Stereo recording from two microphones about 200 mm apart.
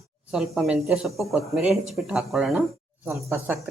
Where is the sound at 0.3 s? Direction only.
5° right (ahead or behind).